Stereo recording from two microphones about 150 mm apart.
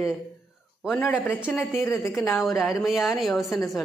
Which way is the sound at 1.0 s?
15° left (ahead or behind).